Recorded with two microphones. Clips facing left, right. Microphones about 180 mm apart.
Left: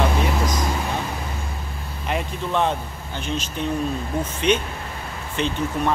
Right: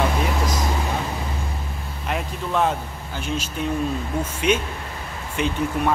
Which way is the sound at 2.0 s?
Centre (ahead or behind).